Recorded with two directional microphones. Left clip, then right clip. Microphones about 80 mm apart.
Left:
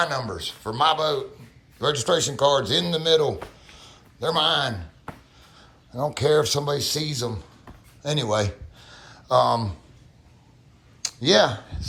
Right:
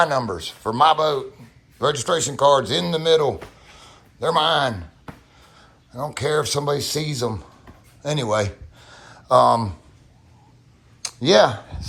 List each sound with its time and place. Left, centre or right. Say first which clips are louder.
0.0 s a man's voice: right 5 dB; left
1.9 s speech: even; left
2.1 s speech: right 5 dB; left
5.0 s a sound: left 1 dB; left
6.0 s speech: left 2 dB; left
6.7 s speech: right 2 dB; left
8.1 s speech: right 2 dB; left
8.8 s a sound: right 2 dB; left
11.0 s a sound: right 3 dB; left